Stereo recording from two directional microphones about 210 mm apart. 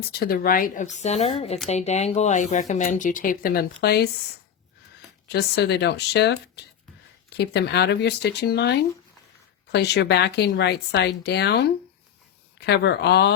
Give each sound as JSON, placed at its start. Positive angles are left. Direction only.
{"t": 0.0, "sound": "speech", "side_deg": 45}
{"t": 5.3, "sound": "speech", "side_deg": 50}